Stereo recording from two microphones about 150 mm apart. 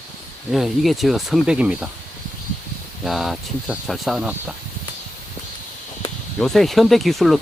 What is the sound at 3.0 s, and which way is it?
Speech, centre (ahead or behind).